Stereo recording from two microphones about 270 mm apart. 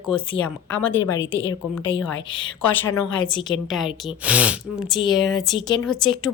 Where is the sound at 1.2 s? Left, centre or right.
Left.